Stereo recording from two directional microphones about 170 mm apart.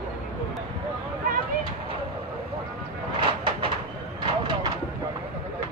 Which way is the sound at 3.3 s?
30° right (ahead or behind).